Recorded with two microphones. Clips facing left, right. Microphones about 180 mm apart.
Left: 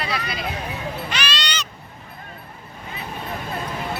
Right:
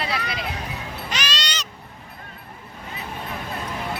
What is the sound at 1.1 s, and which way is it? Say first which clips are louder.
Music: left 2 dB; 40° right (ahead or behind).